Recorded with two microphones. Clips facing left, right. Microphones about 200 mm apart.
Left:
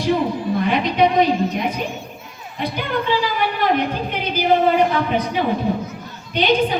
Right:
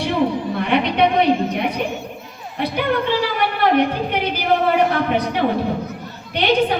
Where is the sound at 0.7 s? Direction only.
65° right (ahead or behind).